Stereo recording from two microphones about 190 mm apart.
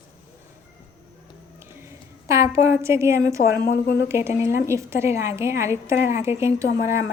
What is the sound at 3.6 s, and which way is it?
Speech, 55° left (ahead or behind).